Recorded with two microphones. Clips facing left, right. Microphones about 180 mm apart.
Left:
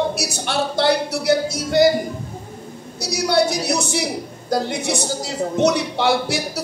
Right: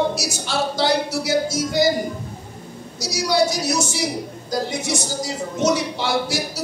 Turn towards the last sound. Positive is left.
turn(degrees=60)  # may be behind; listen again after turning